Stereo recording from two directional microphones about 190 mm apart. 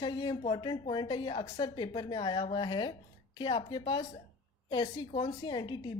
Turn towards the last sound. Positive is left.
turn(degrees=25)  # may be behind; listen again after turning